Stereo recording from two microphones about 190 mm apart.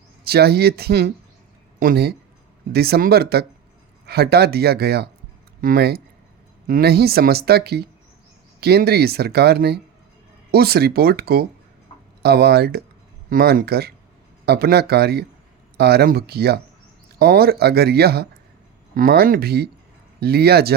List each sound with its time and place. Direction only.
0.3 s a woman's voice: 55° right (ahead or behind)